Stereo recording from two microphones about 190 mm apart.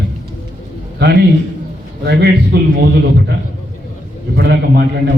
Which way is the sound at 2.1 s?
60° right (ahead or behind).